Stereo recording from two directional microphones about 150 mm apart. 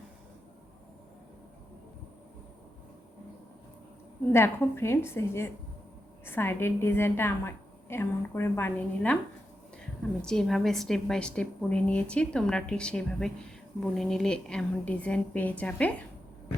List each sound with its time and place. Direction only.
4.3 s a woman's voice: 15° left (ahead or behind)
10.2 s a woman's voice: 5° left (ahead or behind)